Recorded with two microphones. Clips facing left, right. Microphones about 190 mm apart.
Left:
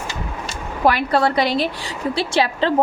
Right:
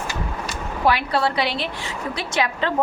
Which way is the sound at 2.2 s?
30° left (ahead or behind).